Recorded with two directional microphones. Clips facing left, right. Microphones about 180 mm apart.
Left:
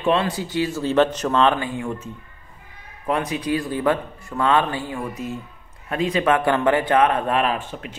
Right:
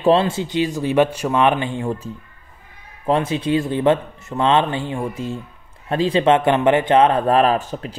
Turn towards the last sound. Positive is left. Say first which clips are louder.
# right 6 dB
turn(degrees=-40)  # may be behind; listen again after turning